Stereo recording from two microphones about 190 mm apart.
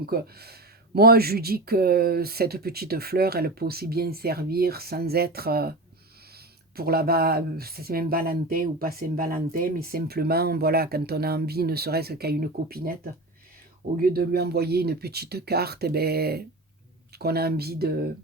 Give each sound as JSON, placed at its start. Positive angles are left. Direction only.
{"t": 0.0, "sound": "speech", "side_deg": -55}
{"t": 6.7, "sound": "speech", "side_deg": -55}